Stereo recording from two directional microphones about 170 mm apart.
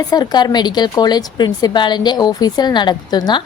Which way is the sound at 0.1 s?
25° left (ahead or behind).